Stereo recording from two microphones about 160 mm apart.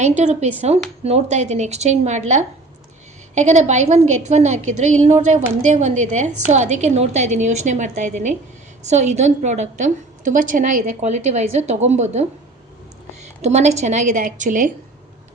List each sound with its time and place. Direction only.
0.0 s a woman's voice: 45° right (ahead or behind)
13.4 s a woman's voice: 45° right (ahead or behind)